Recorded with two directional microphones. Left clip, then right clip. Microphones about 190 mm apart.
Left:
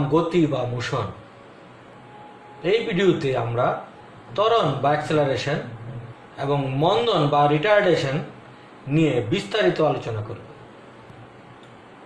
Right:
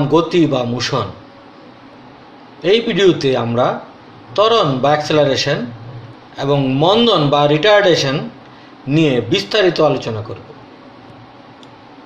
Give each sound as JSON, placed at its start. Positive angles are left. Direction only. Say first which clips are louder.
{"t": 0.1, "sound": "a man's voice", "louder": "right 7 dB", "side_deg": -35}
{"t": 2.6, "sound": "a man's voice", "louder": "right 8 dB", "side_deg": -40}